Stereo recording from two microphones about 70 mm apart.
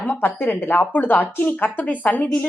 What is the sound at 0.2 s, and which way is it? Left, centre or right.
Speech, left.